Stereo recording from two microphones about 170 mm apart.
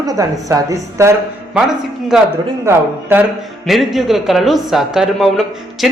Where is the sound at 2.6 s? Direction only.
15° right (ahead or behind).